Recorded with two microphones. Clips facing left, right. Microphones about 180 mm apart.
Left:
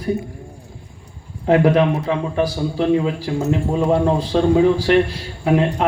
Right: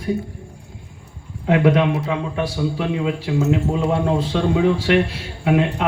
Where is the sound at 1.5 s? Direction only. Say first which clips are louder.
Left 2 dB; 35° left (ahead or behind).